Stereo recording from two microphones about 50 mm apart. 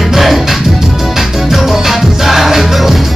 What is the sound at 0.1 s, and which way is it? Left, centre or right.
Music, centre.